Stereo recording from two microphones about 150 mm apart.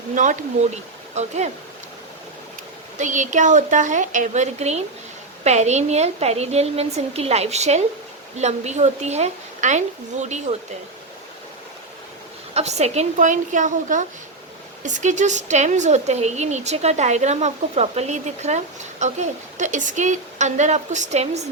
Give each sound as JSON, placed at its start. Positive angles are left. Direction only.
{"t": 0.1, "sound": "speech", "side_deg": -60}
{"t": 3.0, "sound": "a woman's voice", "side_deg": -55}
{"t": 12.5, "sound": "a woman's voice", "side_deg": -45}